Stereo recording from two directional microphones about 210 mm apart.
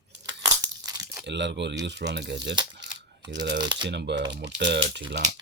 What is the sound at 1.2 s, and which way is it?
Speech, 55° right (ahead or behind).